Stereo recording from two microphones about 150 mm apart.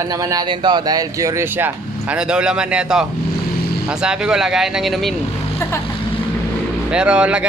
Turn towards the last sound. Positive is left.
turn(degrees=-5)  # may be behind; listen again after turning